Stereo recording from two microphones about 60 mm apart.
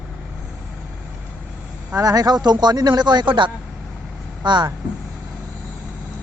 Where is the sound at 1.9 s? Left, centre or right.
Right.